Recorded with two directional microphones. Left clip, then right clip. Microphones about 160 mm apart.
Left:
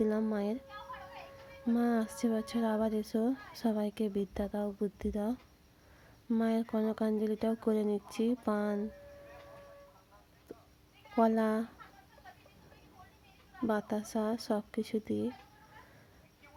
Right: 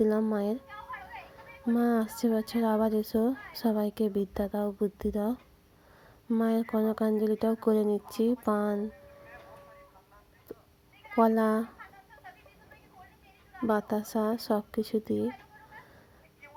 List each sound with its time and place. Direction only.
0.0 s a woman's voice: 15° right (ahead or behind)
1.7 s speech: 20° right (ahead or behind)
6.4 s speech: 20° right (ahead or behind)
11.1 s speech: 20° right (ahead or behind)
13.7 s a woman's voice: 20° right (ahead or behind)